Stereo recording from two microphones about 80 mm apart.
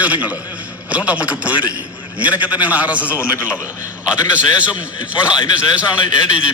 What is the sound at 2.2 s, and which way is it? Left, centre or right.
A man's voice, centre.